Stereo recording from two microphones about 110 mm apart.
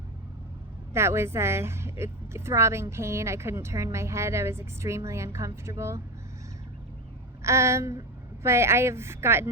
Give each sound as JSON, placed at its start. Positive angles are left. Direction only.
{"t": 0.9, "sound": "a woman's voice", "side_deg": -25}
{"t": 7.4, "sound": "a woman's voice", "side_deg": -25}